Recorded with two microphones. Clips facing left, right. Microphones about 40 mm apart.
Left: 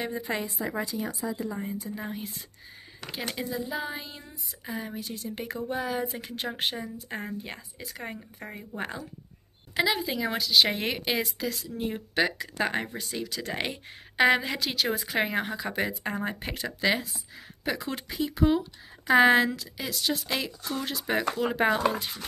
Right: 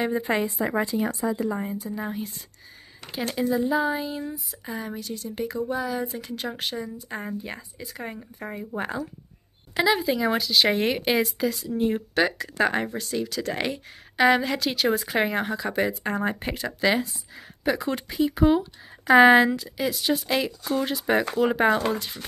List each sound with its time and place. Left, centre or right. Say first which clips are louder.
0.1 s speech: right 7 dB; right
1.8 s a woman's voice: right 4 dB; centre
7.2 s a woman's voice: right 4 dB; centre
18.3 s a woman's voice: right 3 dB; centre